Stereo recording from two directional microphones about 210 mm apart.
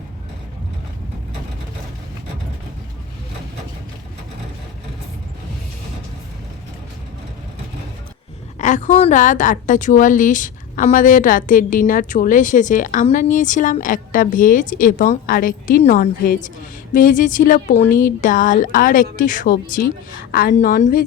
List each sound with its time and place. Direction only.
8.5 s a woman's voice: 35° left (ahead or behind)